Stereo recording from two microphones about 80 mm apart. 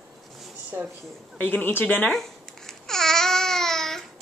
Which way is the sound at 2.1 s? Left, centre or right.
Centre.